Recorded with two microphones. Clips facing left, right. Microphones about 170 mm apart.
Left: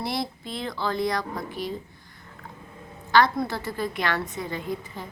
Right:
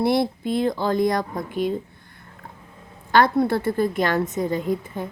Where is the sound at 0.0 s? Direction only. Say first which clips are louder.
Right 10 dB; 55° right (ahead or behind).